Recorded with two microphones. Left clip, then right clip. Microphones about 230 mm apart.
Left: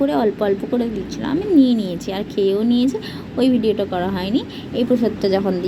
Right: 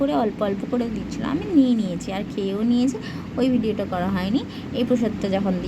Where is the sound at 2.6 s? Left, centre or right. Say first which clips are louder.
Left 4 dB; centre.